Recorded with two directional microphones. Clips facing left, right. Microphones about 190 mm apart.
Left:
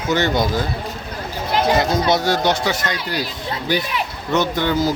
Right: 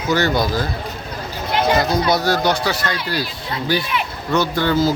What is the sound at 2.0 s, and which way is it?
Speech, 25° left (ahead or behind).